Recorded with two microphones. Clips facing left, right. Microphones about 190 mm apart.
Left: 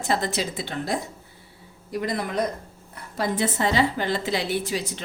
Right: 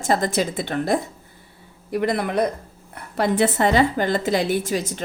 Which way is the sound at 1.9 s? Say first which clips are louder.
Right 5 dB; 65° right (ahead or behind).